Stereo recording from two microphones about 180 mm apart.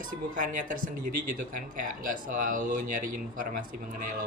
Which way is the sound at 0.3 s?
45° right (ahead or behind).